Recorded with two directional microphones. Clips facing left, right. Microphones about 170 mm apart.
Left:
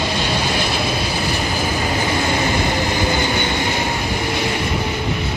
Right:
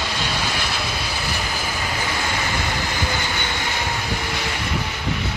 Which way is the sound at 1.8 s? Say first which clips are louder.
Left 6 dB; 25° left (ahead or behind).